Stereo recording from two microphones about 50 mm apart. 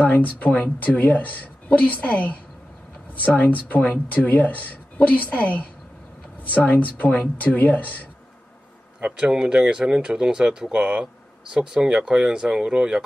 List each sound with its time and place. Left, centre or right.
0.0 s a woman's voice: left
9.3 s speech: centre